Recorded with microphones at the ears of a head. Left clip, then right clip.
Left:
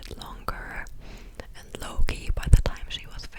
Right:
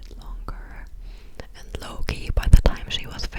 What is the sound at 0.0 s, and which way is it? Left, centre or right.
Whispering, left.